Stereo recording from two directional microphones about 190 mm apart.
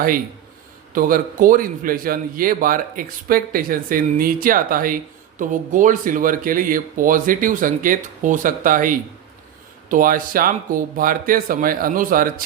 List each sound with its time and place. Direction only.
0.9 s a man's voice: 45° right (ahead or behind)